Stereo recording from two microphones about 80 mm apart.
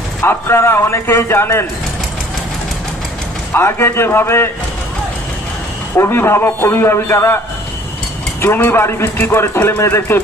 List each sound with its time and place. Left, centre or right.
0.2 s speech: left
3.5 s a man's voice: left
5.9 s a man's voice: left
8.4 s speech: left